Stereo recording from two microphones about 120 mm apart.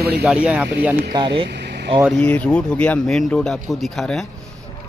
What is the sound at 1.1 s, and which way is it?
Speech, 45° right (ahead or behind).